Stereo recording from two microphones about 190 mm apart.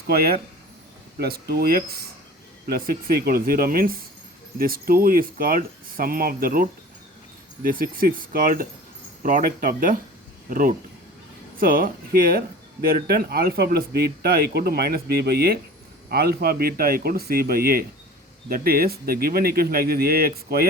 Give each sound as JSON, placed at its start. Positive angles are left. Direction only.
{"t": 0.1, "sound": "speech", "side_deg": -55}